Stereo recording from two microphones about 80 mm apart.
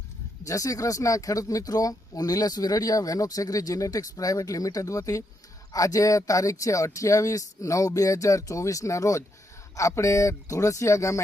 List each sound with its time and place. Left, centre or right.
0.4 s speech: left